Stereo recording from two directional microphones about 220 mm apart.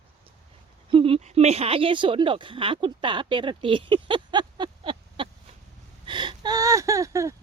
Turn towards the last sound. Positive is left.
turn(degrees=-15)  # may be behind; listen again after turning